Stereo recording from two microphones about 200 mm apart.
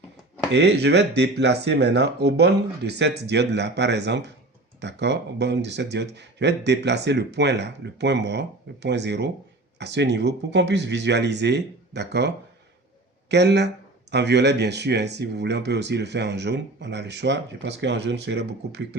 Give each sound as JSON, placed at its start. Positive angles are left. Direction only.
{"t": 0.5, "sound": "speech", "side_deg": -60}